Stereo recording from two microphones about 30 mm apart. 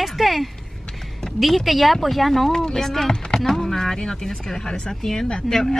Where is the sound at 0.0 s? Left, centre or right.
Centre.